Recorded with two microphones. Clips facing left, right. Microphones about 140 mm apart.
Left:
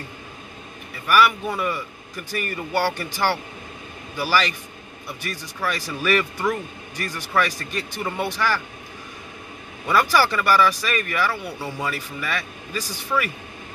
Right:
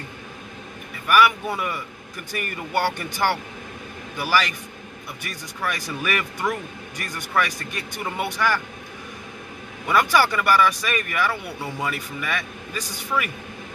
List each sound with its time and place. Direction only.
1.0 s speech: 15° right (ahead or behind)
5.7 s speech: 20° right (ahead or behind)
9.8 s speech: 15° right (ahead or behind)